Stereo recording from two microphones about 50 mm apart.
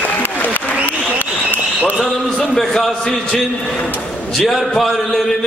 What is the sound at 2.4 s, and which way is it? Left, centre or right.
A man's voice, centre.